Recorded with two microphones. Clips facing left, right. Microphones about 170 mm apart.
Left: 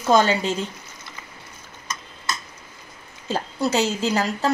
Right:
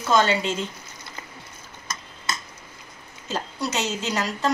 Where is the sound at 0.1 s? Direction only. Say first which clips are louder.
Left 3 dB; 35° left (ahead or behind).